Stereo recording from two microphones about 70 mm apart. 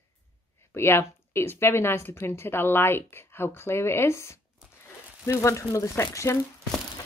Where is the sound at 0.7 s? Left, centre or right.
Left.